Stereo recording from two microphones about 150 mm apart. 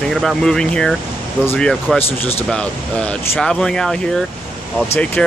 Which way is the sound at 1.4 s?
15° left (ahead or behind).